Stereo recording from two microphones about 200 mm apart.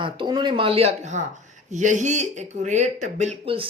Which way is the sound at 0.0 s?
25° right (ahead or behind).